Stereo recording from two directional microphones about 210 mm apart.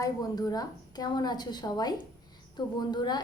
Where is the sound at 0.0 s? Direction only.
15° left (ahead or behind).